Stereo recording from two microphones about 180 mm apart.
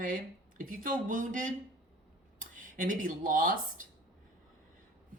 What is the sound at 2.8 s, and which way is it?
Speech, 50° right (ahead or behind).